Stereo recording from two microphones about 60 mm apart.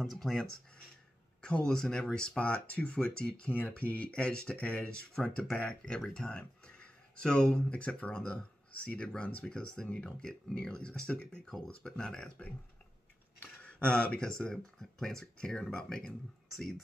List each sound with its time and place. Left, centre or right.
0.0 s speech: centre
1.7 s speech: centre
13.8 s speech: centre